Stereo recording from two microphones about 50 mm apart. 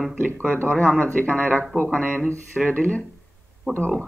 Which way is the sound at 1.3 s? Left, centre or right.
Left.